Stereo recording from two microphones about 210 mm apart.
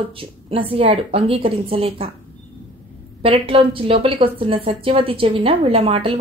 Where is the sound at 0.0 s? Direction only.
25° right (ahead or behind).